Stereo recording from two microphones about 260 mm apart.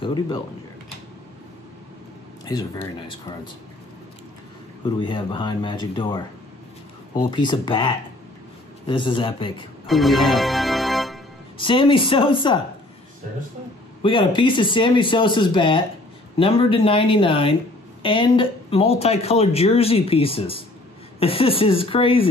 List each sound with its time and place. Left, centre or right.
0.0 s speech: centre
2.4 s speech: centre
5.0 s speech: centre
7.2 s speech: centre
9.8 s organ: centre
11.5 s speech: centre
14.0 s speech: centre